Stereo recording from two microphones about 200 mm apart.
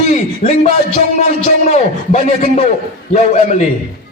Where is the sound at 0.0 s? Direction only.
35° left (ahead or behind).